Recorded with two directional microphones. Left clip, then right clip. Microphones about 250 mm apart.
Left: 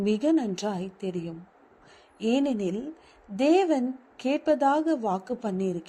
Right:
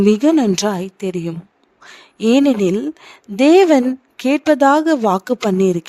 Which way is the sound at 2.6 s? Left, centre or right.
Right.